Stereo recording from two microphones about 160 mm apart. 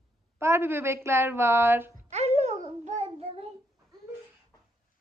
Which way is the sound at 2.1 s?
40° right (ahead or behind).